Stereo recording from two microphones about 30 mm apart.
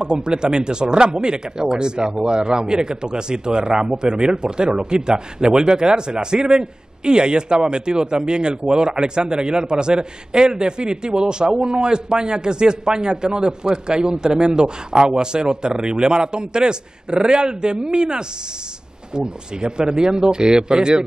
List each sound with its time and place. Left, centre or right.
0.0 s a man's voice: right